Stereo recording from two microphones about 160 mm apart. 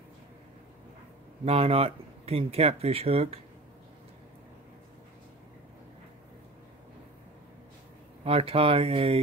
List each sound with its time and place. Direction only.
1.4 s speech: 40° right (ahead or behind)
8.2 s speech: 35° right (ahead or behind)